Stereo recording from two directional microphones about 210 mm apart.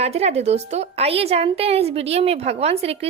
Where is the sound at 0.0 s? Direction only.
30° right (ahead or behind).